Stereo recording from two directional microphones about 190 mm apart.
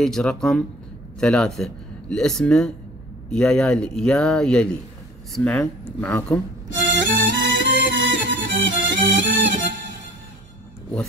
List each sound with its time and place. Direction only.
0.0 s speech: 5° left (ahead or behind)
6.7 s music: 70° right (ahead or behind)